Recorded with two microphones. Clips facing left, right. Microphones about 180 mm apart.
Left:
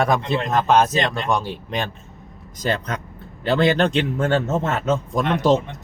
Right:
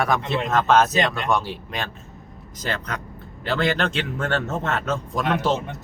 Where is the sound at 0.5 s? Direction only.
15° left (ahead or behind).